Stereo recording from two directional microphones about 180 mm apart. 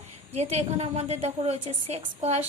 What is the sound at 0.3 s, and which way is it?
A woman's voice, 35° right (ahead or behind).